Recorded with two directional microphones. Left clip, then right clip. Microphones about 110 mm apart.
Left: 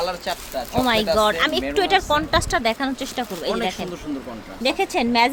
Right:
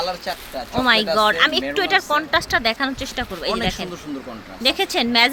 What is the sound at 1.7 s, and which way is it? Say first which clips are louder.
Speech: even; 35° left (ahead or behind).